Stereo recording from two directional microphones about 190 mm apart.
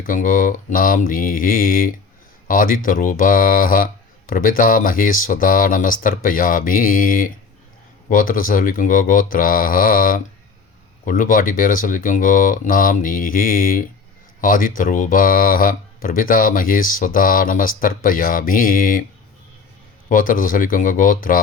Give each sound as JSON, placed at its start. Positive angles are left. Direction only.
{"t": 0.0, "sound": "speech", "side_deg": 45}
{"t": 20.1, "sound": "speech", "side_deg": 45}